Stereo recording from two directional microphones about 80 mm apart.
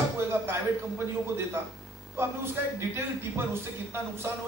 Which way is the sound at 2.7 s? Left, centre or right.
Right.